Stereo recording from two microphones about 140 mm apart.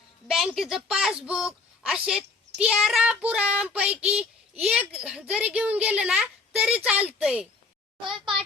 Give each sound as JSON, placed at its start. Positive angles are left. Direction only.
{"t": 0.3, "sound": "a woman's voice", "side_deg": 0}